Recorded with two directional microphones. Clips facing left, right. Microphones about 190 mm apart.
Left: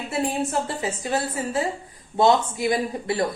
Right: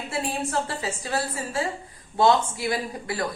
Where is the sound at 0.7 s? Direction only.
20° left (ahead or behind).